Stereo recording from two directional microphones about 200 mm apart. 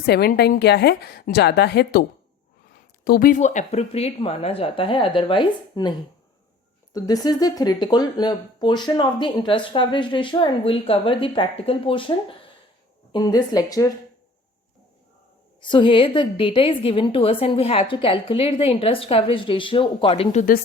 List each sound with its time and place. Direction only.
0.0 s a woman's voice: 50° left (ahead or behind); by 5.9 s 25° left (ahead or behind)
6.9 s speech: 20° left (ahead or behind)
15.6 s speech: 25° left (ahead or behind)